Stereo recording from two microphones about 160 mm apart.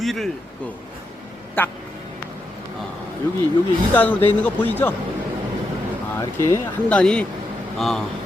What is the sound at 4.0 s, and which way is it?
Speech, 10° left (ahead or behind).